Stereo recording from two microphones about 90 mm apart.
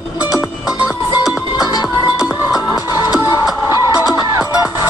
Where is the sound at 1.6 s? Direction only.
45° left (ahead or behind).